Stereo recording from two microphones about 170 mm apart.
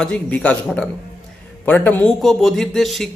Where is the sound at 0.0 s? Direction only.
5° left (ahead or behind).